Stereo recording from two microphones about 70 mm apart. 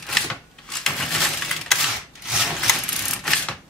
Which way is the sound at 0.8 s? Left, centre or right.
Centre.